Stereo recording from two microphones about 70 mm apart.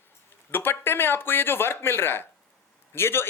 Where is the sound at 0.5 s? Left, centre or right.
Left.